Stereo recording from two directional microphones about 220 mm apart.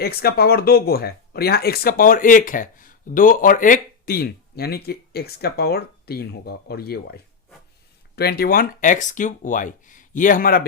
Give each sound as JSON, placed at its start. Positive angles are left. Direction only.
{"t": 0.0, "sound": "speech", "side_deg": 45}